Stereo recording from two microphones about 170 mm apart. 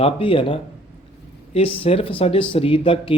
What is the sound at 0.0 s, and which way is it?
A man's voice, 30° left (ahead or behind).